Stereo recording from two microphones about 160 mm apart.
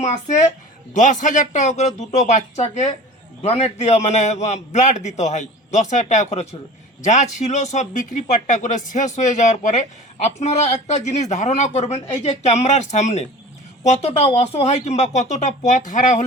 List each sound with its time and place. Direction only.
0.0 s a man's voice: 45° left (ahead or behind)